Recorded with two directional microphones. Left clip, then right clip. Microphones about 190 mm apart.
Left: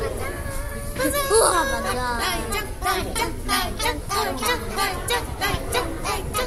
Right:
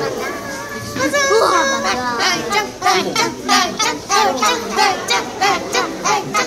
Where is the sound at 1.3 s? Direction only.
60° left (ahead or behind).